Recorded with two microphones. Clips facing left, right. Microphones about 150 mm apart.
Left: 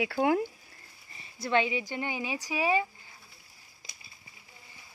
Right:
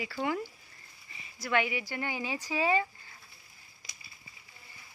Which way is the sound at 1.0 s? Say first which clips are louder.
Left 2 dB; 35° left (ahead or behind).